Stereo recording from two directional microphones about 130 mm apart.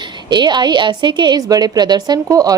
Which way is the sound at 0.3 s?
35° right (ahead or behind).